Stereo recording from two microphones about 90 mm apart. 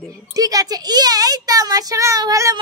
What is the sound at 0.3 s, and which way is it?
A child's voice, 40° right (ahead or behind).